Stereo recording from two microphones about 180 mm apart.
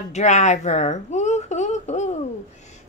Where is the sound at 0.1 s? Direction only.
40° left (ahead or behind).